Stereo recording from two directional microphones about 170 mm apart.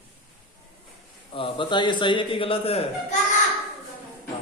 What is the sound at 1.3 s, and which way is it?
A man's voice, 30° left (ahead or behind).